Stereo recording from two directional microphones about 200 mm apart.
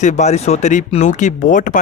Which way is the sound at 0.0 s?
35° left (ahead or behind).